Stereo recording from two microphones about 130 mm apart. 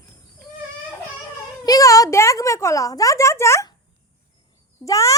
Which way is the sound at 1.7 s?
25° left (ahead or behind).